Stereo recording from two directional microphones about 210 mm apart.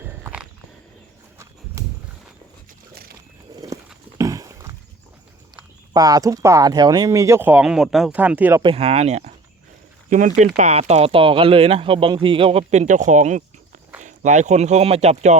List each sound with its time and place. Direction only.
0.0 s biting: 5° right (ahead or behind)
3.5 s walk: 15° right (ahead or behind)
4.2 s clip-clop: 15° right (ahead or behind)
5.9 s speech: 20° right (ahead or behind)
8.6 s speech: 30° right (ahead or behind)